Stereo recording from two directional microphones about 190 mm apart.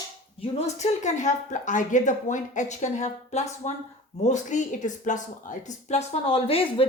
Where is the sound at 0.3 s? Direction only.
30° left (ahead or behind).